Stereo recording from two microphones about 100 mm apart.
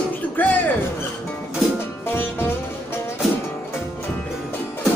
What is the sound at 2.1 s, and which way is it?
Music, 20° left (ahead or behind).